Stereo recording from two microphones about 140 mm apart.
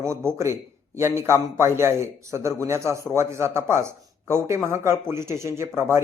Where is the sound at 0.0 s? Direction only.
20° right (ahead or behind).